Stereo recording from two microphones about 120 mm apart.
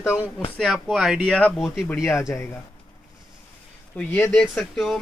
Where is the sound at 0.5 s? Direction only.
Centre (ahead or behind).